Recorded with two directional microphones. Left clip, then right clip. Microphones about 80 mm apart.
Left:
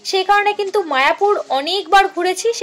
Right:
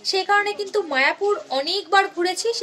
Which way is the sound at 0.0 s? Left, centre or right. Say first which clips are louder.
Left 5 dB; left.